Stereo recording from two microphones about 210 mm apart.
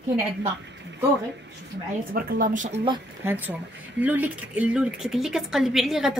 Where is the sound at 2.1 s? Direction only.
40° right (ahead or behind).